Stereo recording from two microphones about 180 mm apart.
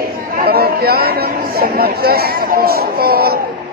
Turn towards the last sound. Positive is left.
turn(degrees=-60)  # may be behind; listen again after turning